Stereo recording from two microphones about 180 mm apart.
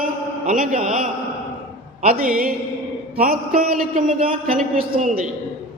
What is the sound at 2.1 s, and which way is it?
A man's voice, 50° right (ahead or behind).